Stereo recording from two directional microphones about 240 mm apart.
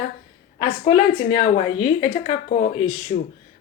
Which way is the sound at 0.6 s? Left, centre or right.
Left.